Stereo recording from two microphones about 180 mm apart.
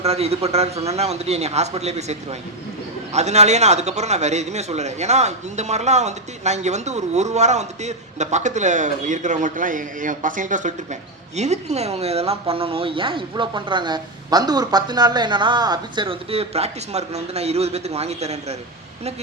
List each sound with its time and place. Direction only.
0.0 s a man's voice: 35° right (ahead or behind)